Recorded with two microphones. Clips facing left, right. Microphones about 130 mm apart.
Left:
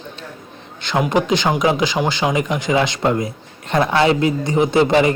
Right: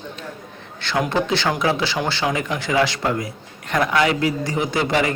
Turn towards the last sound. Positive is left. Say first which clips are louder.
# left 6 dB
turn(degrees=25)  # may be behind; listen again after turning